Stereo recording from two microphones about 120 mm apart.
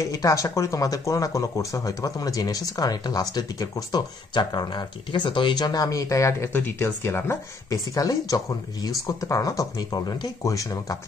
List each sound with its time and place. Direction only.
0.0 s speech: 25° left (ahead or behind)